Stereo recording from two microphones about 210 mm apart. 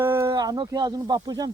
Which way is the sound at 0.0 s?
10° right (ahead or behind).